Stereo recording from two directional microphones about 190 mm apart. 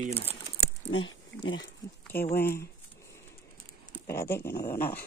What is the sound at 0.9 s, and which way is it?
Speech, 90° left.